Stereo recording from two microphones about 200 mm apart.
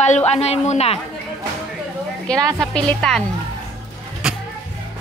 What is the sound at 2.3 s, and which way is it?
Speech, 5° left (ahead or behind).